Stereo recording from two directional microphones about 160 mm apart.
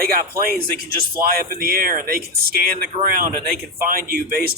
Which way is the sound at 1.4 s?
65° right (ahead or behind).